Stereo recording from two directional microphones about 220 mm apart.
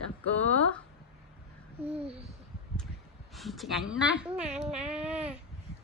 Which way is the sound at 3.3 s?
Centre (ahead or behind).